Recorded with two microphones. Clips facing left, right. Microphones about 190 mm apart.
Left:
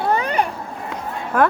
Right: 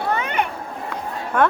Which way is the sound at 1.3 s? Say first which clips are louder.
Left 1 dB; 5° left (ahead or behind).